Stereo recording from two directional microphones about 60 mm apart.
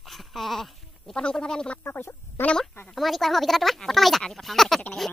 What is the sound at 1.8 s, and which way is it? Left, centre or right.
Speech, left.